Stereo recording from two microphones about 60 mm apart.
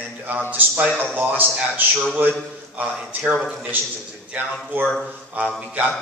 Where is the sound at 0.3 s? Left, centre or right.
Right.